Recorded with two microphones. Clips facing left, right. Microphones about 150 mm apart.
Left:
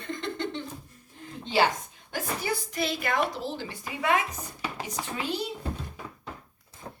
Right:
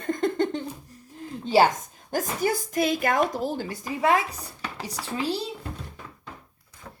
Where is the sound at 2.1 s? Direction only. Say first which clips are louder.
Right 5 dB; 45° right (ahead or behind).